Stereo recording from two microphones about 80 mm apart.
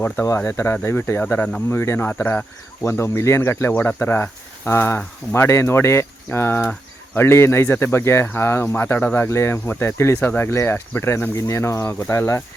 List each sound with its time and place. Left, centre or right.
0.3 s speech: left
2.8 s speech: left